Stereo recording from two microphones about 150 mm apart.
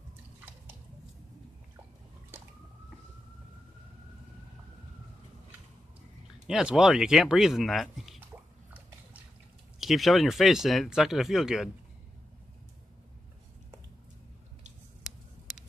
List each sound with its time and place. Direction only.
6.4 s speech: 5° right (ahead or behind)
9.8 s speech: centre (ahead or behind)